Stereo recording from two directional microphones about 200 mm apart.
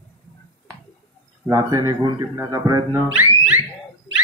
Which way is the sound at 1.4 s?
20° right (ahead or behind).